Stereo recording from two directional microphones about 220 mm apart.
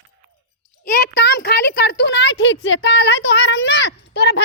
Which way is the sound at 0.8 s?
45° left (ahead or behind).